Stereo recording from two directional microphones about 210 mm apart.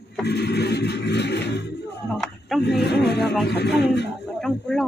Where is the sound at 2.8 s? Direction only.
50° left (ahead or behind).